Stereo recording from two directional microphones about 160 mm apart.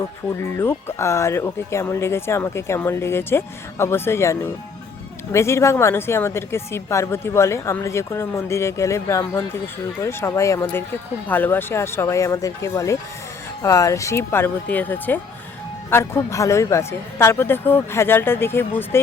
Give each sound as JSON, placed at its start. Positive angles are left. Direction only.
{"t": 0.3, "sound": "speech", "side_deg": 15}